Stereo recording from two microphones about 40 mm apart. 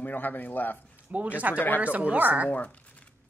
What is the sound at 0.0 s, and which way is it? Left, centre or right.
Speech, left.